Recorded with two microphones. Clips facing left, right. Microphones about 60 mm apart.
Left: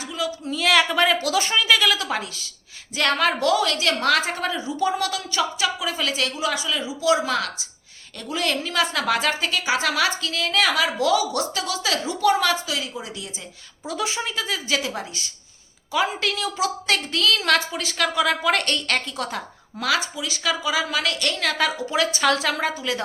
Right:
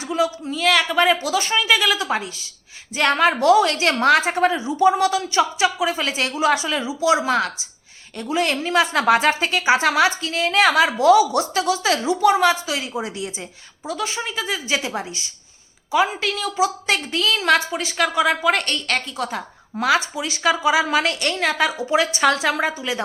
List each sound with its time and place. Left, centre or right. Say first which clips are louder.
0.0 s a sound: right 6 dB; right
0.4 s a woman's voice: right 1 dB; centre; by 6.4 s right
6.4 s a woman's voice: right 9 dB; right
6.8 s a woman's voice: right 1 dB; right
12.0 s a woman's voice: right 4 dB; centre
12.6 s a woman's voice: right 4 dB; right
13.8 s a woman's voice: right 1 dB; centre
19.7 s a woman's voice: right 5 dB; right